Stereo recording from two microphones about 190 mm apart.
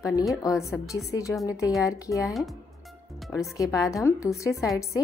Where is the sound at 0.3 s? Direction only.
15° left (ahead or behind).